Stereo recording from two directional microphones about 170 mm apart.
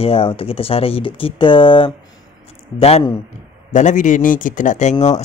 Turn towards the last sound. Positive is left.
turn(degrees=45)  # may be behind; listen again after turning